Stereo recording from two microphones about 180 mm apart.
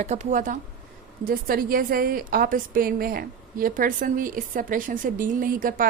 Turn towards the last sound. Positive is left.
turn(degrees=-50)  # may be behind; listen again after turning